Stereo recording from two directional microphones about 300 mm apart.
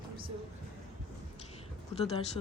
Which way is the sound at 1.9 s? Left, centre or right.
Centre.